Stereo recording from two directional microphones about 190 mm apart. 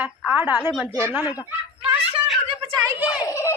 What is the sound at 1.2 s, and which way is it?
Speech, 20° left (ahead or behind).